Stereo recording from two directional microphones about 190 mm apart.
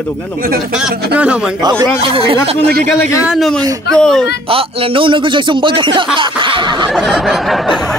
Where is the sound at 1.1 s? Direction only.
5° right (ahead or behind).